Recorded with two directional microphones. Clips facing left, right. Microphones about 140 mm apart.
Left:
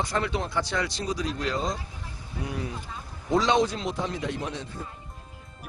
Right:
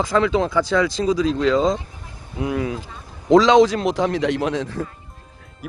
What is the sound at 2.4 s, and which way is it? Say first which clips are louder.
A man's voice: right 10 dB; 90° right.